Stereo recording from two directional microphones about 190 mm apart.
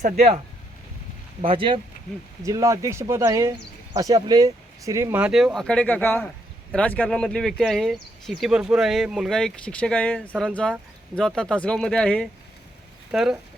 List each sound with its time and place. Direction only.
0.0 s speech: 35° right (ahead or behind)
1.4 s speech: 30° right (ahead or behind)
2.4 s speech: 15° right (ahead or behind)